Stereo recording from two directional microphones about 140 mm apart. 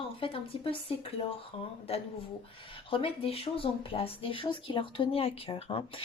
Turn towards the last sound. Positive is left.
turn(degrees=40)  # may be behind; listen again after turning